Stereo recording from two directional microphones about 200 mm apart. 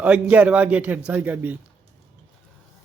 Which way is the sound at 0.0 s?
5° right (ahead or behind).